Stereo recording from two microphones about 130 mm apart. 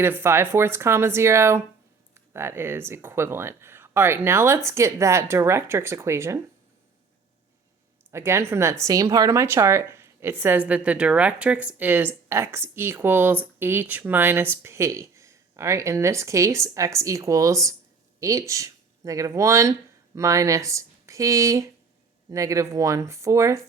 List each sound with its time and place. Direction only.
0.0 s a woman's voice: 20° right (ahead or behind)
8.1 s a woman's voice: 20° right (ahead or behind)